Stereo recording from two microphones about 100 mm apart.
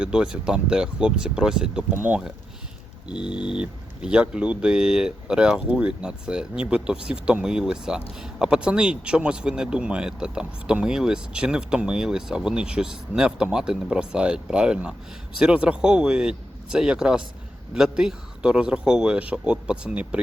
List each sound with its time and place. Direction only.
0.0 s speech: 10° right (ahead or behind)
1.9 s speech: 15° right (ahead or behind)